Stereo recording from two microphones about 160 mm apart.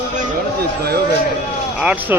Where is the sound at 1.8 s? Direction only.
10° right (ahead or behind).